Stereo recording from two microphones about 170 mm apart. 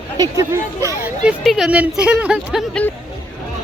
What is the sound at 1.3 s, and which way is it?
Speech, centre (ahead or behind).